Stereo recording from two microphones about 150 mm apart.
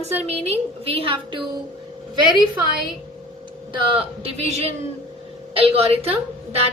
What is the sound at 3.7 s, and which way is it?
A woman's voice, 35° right (ahead or behind).